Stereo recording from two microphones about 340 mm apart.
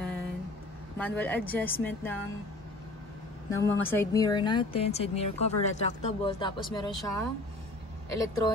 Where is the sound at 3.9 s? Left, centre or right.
Centre.